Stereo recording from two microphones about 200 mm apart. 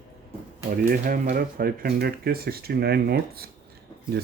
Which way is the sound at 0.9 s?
45° right (ahead or behind).